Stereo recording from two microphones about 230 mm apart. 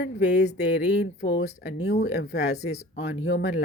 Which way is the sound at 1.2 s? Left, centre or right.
Left.